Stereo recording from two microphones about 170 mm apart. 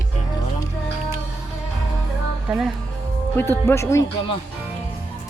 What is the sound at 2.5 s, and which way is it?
Speech, 5° right (ahead or behind).